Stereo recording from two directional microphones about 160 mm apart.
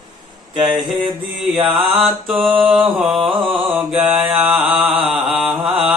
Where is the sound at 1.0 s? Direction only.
25° right (ahead or behind).